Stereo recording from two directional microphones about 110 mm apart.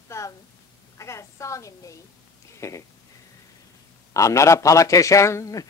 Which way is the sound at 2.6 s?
25° left (ahead or behind).